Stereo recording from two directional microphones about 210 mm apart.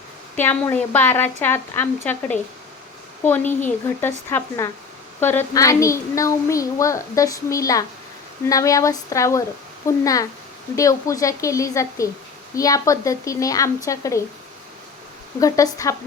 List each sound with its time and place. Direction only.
0.3 s a child's voice: 10° left (ahead or behind)
3.2 s a child's voice: 10° left (ahead or behind)
15.4 s a child's voice: 15° left (ahead or behind)